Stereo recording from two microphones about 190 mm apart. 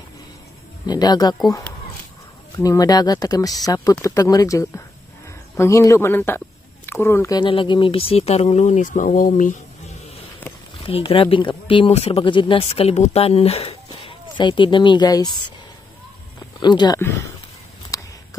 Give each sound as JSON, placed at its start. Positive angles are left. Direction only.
{"t": 0.8, "sound": "speech", "side_deg": 20}
{"t": 2.5, "sound": "speech", "side_deg": 20}
{"t": 7.3, "sound": "speech", "side_deg": 25}
{"t": 10.8, "sound": "speech", "side_deg": 30}
{"t": 16.5, "sound": "speech", "side_deg": 25}
{"t": 17.9, "sound": "a sound", "side_deg": 15}